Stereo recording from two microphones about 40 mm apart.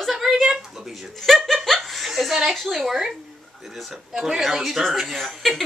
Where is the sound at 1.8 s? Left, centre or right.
Centre.